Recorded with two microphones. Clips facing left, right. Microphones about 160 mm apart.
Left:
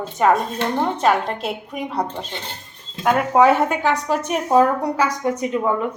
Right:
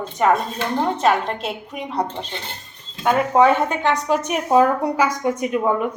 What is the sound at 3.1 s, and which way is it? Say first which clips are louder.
A woman's voice: even; 5° left (ahead or behind).